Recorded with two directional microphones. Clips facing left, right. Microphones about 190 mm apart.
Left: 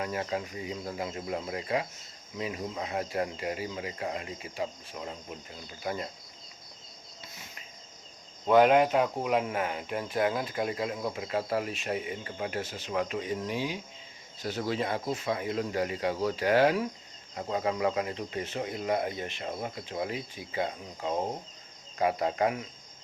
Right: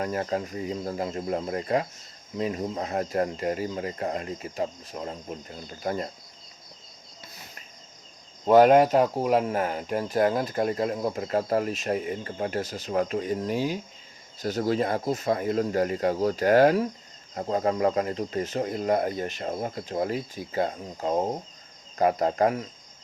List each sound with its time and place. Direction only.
0.0 s speech: 45° right (ahead or behind)
8.4 s speech: 40° right (ahead or behind)